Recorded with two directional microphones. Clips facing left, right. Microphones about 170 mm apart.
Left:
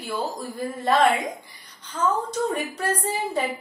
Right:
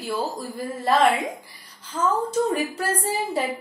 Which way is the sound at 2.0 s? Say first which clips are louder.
Even; 25° right (ahead or behind).